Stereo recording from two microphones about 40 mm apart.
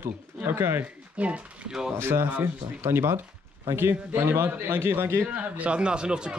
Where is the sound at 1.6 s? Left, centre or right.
Centre.